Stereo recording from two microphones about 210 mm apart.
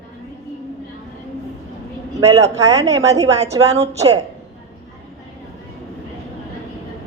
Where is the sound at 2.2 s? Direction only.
15° right (ahead or behind).